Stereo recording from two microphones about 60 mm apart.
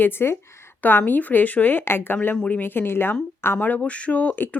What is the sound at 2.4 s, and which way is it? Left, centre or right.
Speech, left.